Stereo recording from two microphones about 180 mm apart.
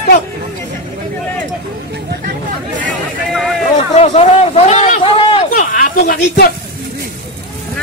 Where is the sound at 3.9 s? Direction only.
40° left (ahead or behind).